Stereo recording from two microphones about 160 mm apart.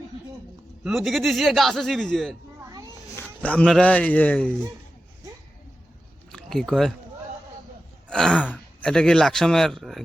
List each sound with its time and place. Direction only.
0.9 s a man's voice: centre (ahead or behind)
6.3 s speech: 5° left (ahead or behind)
8.1 s a man's voice: 5° left (ahead or behind)